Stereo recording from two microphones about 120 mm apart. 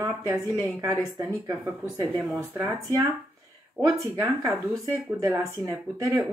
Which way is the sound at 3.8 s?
30° right (ahead or behind).